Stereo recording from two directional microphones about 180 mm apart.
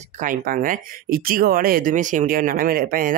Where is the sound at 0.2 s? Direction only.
50° right (ahead or behind).